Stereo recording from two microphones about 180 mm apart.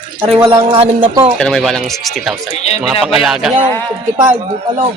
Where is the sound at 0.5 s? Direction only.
30° right (ahead or behind).